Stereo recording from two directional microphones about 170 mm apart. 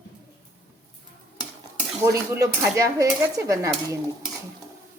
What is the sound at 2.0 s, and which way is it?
A woman's voice, 20° right (ahead or behind).